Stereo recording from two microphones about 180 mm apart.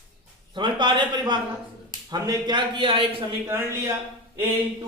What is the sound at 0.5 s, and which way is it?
Speech, 25° right (ahead or behind).